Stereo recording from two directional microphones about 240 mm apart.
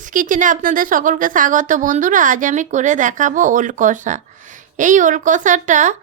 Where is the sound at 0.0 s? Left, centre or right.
Right.